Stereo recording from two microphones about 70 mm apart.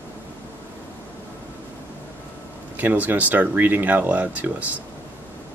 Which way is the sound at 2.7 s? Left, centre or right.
Right.